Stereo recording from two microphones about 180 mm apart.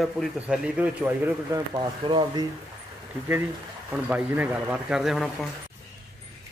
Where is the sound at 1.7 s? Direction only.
25° right (ahead or behind).